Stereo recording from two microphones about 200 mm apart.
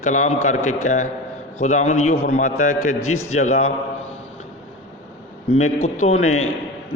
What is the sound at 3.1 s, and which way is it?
Speech, 90° left.